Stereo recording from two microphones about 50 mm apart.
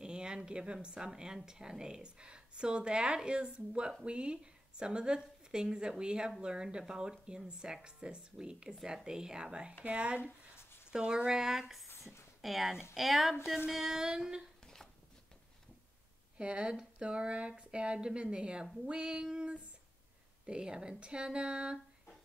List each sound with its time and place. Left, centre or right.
0.0 s a sound: centre
0.8 s a woman's voice: centre
10.9 s a woman's voice: centre
16.3 s a woman's voice: right